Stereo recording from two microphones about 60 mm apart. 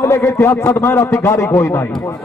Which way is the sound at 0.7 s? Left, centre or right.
Left.